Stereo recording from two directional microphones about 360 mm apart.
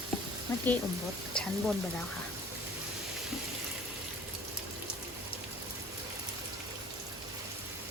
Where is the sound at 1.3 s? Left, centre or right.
Centre.